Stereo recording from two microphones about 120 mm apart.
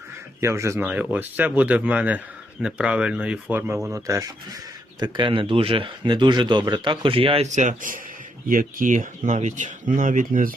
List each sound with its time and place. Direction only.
0.4 s speech: 25° right (ahead or behind)
0.9 s speech: 10° right (ahead or behind)
3.9 s speech: 25° right (ahead or behind)
4.9 s speech: 40° right (ahead or behind)
7.4 s speech: 85° right